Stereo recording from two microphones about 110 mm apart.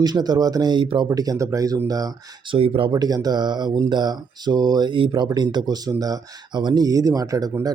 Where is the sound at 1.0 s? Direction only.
35° right (ahead or behind).